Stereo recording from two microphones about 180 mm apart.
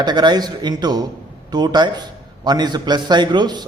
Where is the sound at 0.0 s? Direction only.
25° right (ahead or behind).